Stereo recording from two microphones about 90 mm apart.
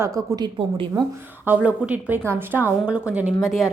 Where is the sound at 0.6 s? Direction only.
80° right.